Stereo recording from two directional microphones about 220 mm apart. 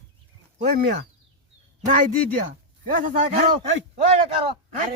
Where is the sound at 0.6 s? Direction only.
40° right (ahead or behind).